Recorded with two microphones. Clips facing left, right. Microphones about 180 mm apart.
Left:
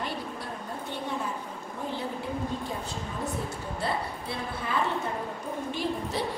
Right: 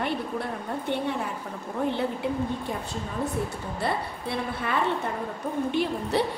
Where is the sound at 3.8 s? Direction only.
65° right (ahead or behind).